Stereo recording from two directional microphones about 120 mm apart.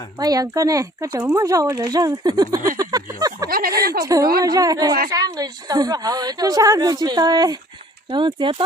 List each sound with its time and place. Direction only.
0.2 s a woman's voice: 30° right (ahead or behind)